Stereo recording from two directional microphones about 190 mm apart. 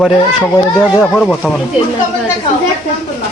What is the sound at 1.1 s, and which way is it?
Speech, 5° left (ahead or behind).